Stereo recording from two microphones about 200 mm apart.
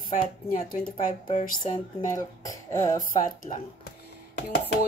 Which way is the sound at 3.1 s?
40° left (ahead or behind).